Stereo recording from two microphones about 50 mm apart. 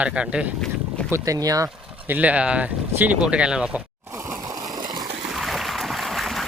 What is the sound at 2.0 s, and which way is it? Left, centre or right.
Speech, right.